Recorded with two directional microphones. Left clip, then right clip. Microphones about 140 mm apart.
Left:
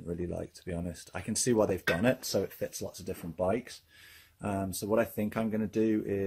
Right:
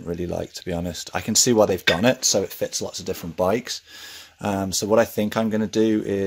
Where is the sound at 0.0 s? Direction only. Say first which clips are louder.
Right 9 dB; 25° right (ahead or behind).